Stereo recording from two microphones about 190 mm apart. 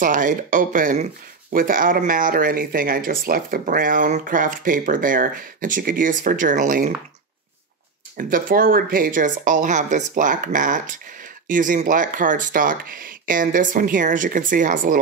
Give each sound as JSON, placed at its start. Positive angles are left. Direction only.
{"t": 0.0, "sound": "speech", "side_deg": -45}
{"t": 8.2, "sound": "speech", "side_deg": -45}